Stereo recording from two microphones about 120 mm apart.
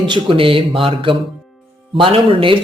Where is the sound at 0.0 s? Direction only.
45° right (ahead or behind).